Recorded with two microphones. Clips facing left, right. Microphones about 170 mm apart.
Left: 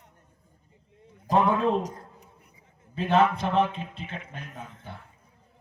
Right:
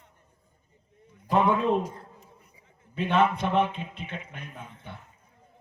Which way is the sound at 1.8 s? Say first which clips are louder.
Left 1 dB; 40° left (ahead or behind).